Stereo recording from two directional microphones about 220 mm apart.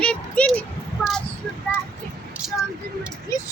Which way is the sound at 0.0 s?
5° left (ahead or behind).